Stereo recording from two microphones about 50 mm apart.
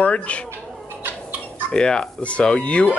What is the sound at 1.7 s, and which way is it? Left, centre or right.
Speech, centre.